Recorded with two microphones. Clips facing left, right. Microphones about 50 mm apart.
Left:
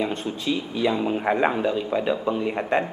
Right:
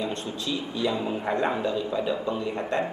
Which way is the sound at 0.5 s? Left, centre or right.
Left.